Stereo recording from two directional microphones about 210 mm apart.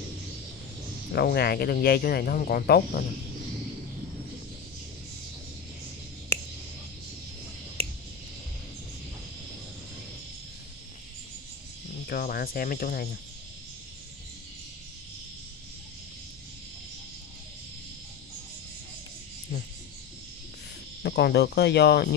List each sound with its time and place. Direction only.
1.1 s speech: 50° left (ahead or behind)
12.1 s speech: 45° left (ahead or behind)
21.0 s speech: 50° left (ahead or behind)